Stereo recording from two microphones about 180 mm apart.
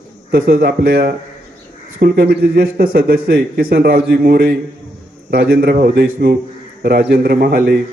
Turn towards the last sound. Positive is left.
turn(degrees=-60)  # may be behind; listen again after turning